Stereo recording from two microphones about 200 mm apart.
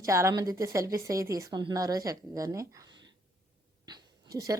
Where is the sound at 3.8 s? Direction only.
20° right (ahead or behind).